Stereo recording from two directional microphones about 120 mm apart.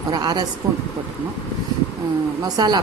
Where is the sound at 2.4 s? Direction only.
35° right (ahead or behind).